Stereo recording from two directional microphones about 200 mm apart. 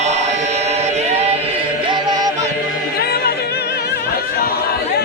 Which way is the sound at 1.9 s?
20° right (ahead or behind).